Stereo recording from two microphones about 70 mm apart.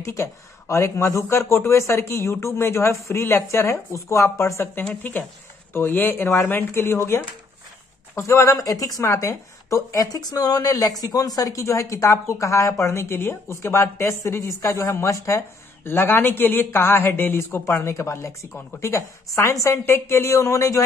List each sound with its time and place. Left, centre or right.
0.0 s speech: left
5.7 s a woman's voice: left
19.9 s speech: left